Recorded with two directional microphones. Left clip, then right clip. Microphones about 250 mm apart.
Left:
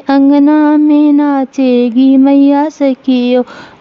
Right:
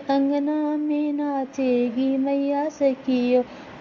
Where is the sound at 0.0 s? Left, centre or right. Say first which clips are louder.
Left 14 dB; left.